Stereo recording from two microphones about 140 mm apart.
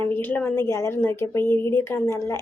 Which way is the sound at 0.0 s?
15° left (ahead or behind).